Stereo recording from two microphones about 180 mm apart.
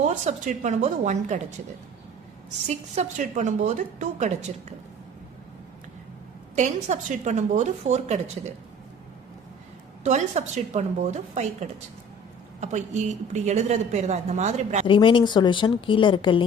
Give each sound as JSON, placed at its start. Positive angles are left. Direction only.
{"t": 0.0, "sound": "a woman's voice", "side_deg": -40}
{"t": 2.6, "sound": "a woman's voice", "side_deg": -40}
{"t": 6.6, "sound": "a woman's voice", "side_deg": -40}
{"t": 10.0, "sound": "a woman's voice", "side_deg": -40}
{"t": 14.8, "sound": "speech", "side_deg": 30}